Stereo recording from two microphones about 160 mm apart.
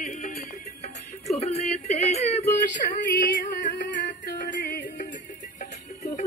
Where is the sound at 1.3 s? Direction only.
40° left (ahead or behind).